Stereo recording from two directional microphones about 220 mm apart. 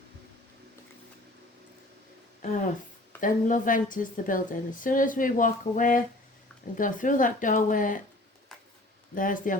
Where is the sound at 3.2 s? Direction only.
35° left (ahead or behind).